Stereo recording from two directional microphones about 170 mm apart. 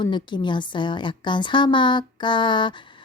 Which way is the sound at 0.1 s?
25° left (ahead or behind).